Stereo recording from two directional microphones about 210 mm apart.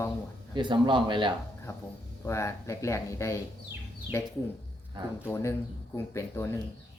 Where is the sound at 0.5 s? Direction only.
20° right (ahead or behind).